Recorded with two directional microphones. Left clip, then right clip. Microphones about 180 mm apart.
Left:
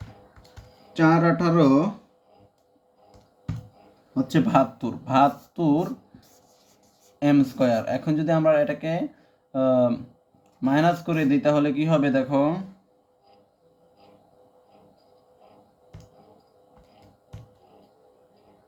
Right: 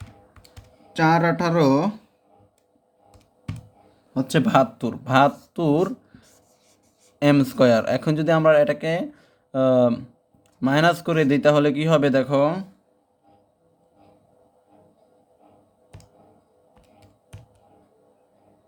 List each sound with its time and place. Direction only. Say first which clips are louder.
0.9 s speech: right 1 dB; 55° right (ahead or behind)
4.1 s speech: right 2 dB; 65° right (ahead or behind); by 5.9 s 90° right
7.2 s speech: right 3 dB; 75° right (ahead or behind)